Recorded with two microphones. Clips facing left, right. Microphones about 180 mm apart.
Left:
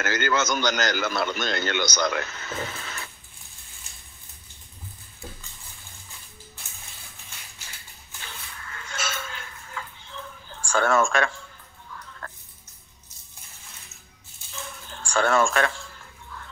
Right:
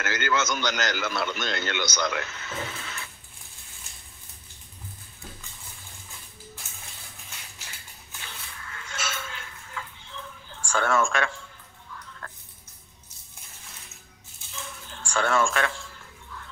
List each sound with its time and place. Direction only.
0.0 s a man's voice: 40° left (ahead or behind)
8.7 s a sound: 40° left (ahead or behind)
15.0 s speech: 40° left (ahead or behind)